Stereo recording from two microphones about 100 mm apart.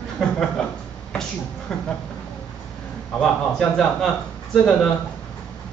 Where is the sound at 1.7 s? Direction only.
5° left (ahead or behind).